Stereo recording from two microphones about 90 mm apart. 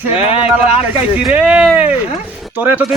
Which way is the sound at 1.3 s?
10° right (ahead or behind).